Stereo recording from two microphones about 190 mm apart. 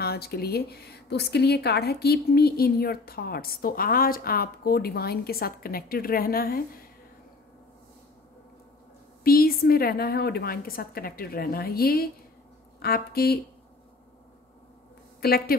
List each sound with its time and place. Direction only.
0.0 s speech: 55° left (ahead or behind)
9.2 s speech: 50° left (ahead or behind)
15.1 s a woman's voice: 55° left (ahead or behind)